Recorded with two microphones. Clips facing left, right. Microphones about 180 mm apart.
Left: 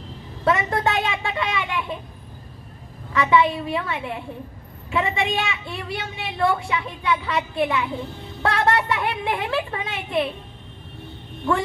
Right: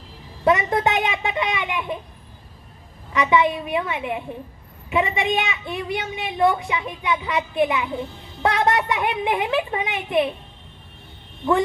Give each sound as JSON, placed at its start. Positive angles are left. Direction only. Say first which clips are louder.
{"t": 0.5, "sound": "a child's voice", "louder": "right 2 dB", "side_deg": -20}
{"t": 3.1, "sound": "a woman's voice", "louder": "even", "side_deg": -20}